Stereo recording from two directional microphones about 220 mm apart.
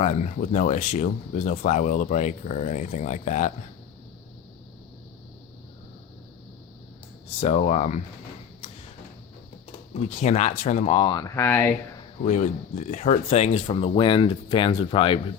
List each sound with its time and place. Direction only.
0.0 s speech: 30° left (ahead or behind)
7.4 s speech: 30° left (ahead or behind)
9.9 s speech: 30° left (ahead or behind); by 11.7 s 10° left (ahead or behind)
12.2 s speech: 30° left (ahead or behind)